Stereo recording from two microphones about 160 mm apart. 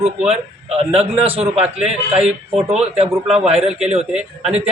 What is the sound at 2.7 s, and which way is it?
A man's voice, 40° right (ahead or behind).